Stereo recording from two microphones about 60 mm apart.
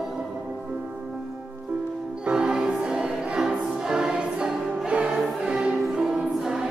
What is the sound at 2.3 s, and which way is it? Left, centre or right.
Music, centre.